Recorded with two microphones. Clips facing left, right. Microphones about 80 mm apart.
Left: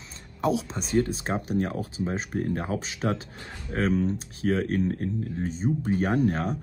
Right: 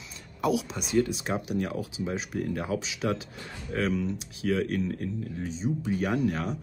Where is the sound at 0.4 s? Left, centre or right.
Left.